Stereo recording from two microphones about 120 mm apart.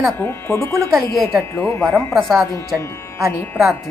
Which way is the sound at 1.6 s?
20° left (ahead or behind).